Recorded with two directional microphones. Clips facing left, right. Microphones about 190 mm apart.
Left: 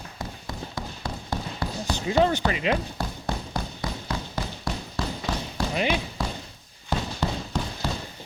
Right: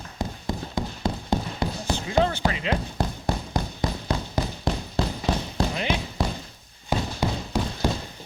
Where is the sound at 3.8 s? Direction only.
20° right (ahead or behind).